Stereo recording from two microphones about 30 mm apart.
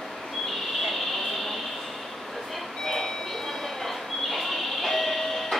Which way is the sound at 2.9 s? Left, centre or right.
Centre.